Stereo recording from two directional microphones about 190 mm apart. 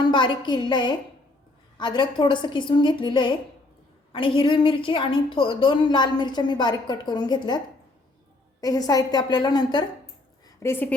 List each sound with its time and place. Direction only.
0.0 s a woman's voice: 25° left (ahead or behind)
8.6 s a woman's voice: 20° left (ahead or behind)
10.6 s a woman's voice: 10° left (ahead or behind)